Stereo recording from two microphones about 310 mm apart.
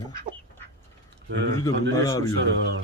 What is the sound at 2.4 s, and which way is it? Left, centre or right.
Speech, right.